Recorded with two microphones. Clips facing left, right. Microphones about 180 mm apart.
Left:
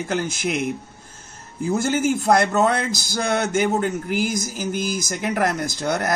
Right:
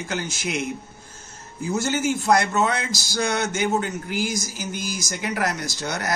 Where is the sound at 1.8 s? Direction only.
55° left (ahead or behind).